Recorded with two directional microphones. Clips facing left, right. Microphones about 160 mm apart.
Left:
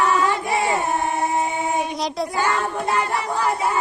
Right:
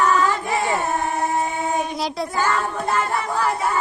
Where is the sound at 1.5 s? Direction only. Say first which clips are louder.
Even; 20° left (ahead or behind).